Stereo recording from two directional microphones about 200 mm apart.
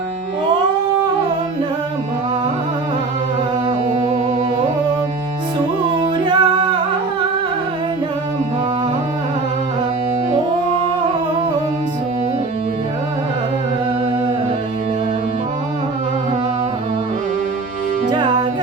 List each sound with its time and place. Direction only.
3.7 s music: 25° right (ahead or behind)
5.9 s music: 25° right (ahead or behind)
18.1 s music: 20° right (ahead or behind)